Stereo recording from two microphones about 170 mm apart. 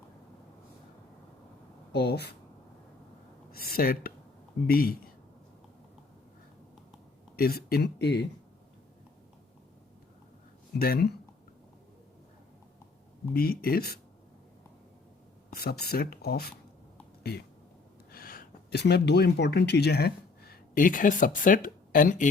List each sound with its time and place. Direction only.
1.9 s speech: 75° left (ahead or behind)
3.5 s speech: 60° left (ahead or behind)
7.3 s speech: 65° left (ahead or behind)
10.8 s speech: 65° left (ahead or behind)
13.3 s speech: 65° left (ahead or behind)
15.5 s speech: 65° left (ahead or behind)
18.1 s speech: 60° left (ahead or behind)